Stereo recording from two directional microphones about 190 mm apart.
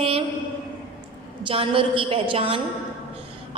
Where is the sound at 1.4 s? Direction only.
30° right (ahead or behind).